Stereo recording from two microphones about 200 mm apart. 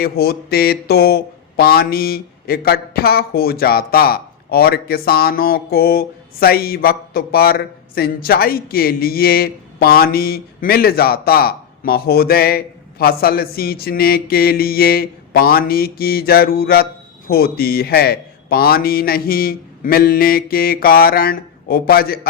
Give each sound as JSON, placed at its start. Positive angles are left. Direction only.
{"t": 0.0, "sound": "speech", "side_deg": 50}